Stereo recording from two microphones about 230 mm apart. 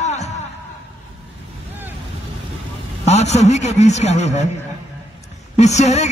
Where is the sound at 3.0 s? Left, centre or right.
Left.